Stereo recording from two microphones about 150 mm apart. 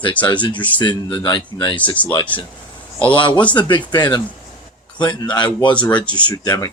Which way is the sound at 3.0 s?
35° left (ahead or behind).